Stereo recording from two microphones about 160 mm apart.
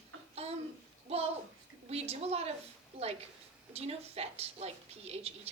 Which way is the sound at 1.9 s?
40° right (ahead or behind).